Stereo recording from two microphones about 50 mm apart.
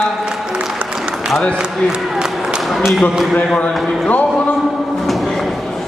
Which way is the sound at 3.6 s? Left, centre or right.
Left.